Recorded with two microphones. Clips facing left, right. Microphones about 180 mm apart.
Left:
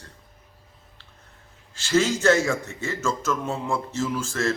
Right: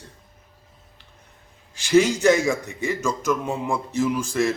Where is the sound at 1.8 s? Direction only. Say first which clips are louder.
Right 4 dB; 15° right (ahead or behind).